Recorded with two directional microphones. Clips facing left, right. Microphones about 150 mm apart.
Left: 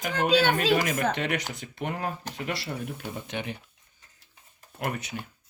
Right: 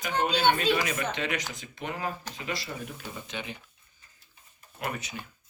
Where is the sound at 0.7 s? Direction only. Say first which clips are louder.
Left 4 dB; 45° left (ahead or behind).